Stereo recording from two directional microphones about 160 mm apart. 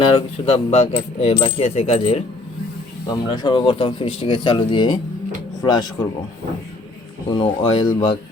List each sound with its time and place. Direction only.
0.4 s speech: 40° left (ahead or behind)
3.1 s speech: 25° left (ahead or behind)
7.3 s speech: 30° left (ahead or behind)